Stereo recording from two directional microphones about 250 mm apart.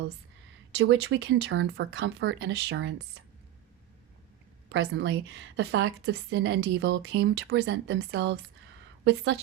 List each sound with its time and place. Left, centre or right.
0.8 s a woman's voice: right
4.7 s a woman's voice: right